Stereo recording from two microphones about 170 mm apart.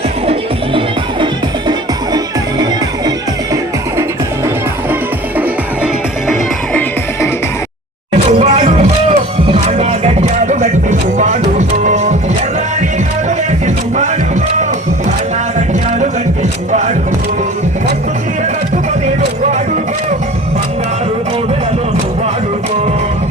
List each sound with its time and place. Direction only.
8.1 s music: 40° right (ahead or behind)
13.7 s music: 45° right (ahead or behind)
15.5 s a sound: 45° right (ahead or behind)
19.0 s music: 45° right (ahead or behind)